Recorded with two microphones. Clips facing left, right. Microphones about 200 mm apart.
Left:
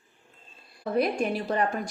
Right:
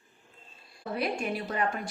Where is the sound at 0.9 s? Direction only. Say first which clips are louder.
Left 6 dB; 40° left (ahead or behind).